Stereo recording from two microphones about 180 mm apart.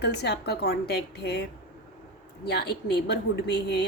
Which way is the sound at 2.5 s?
65° left (ahead or behind).